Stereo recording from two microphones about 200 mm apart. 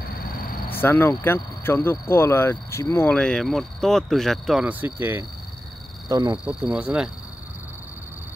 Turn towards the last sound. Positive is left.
turn(degrees=-5)  # may be behind; listen again after turning